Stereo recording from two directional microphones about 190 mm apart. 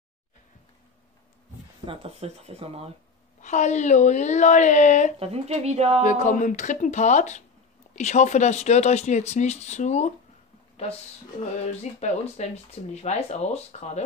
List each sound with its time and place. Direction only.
1.9 s speech: 30° right (ahead or behind)
3.3 s speech: 40° left (ahead or behind)
5.2 s speech: 35° right (ahead or behind)
6.0 s speech: 40° left (ahead or behind)
11.6 s speech: 35° left (ahead or behind)